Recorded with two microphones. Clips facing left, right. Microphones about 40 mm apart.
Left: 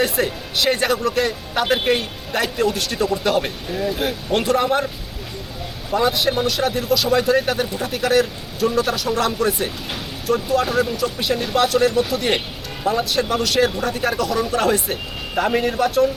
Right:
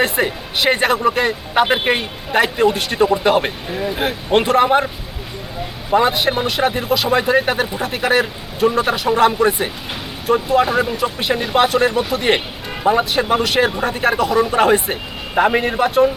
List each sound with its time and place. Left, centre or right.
0.0 s speech: right
5.9 s speech: right